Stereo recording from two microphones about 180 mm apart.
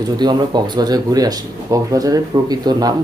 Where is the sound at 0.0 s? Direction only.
25° right (ahead or behind).